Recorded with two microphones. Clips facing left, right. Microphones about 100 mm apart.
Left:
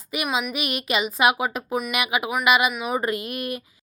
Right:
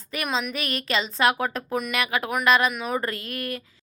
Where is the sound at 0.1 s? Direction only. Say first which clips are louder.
Left 2 dB; 10° left (ahead or behind).